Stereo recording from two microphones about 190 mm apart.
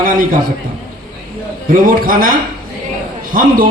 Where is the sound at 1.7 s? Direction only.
45° right (ahead or behind).